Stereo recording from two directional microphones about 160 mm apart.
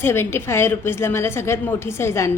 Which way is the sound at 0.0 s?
15° left (ahead or behind).